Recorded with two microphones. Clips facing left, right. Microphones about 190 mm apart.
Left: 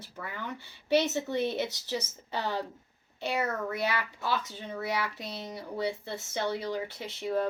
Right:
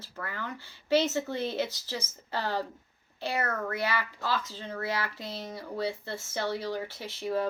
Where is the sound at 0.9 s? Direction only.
20° left (ahead or behind).